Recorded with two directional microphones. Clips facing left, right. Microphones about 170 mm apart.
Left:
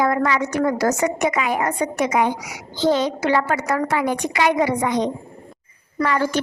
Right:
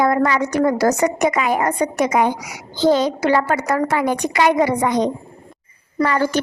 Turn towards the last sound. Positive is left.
turn(degrees=-40)  # may be behind; listen again after turning